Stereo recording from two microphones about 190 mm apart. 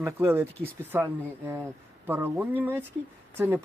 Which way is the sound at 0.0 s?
10° right (ahead or behind).